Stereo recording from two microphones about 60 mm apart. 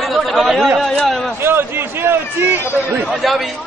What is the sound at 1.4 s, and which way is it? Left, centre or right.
Speech, right.